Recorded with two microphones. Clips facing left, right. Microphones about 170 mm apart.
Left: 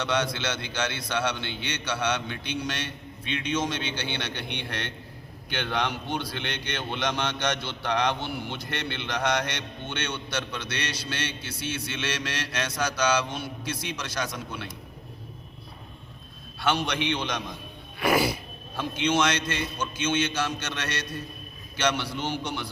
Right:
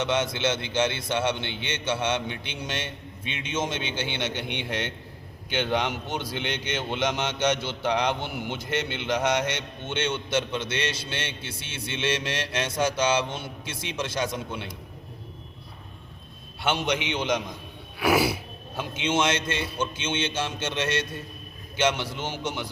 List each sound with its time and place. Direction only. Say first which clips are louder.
0.0 s a man's voice: right 2 dB; 20° right (ahead or behind)
16.6 s a man's voice: even; 20° right (ahead or behind)
18.0 s a sound: right 1 dB; 5° right (ahead or behind)
18.8 s a man's voice: left 1 dB; 20° right (ahead or behind)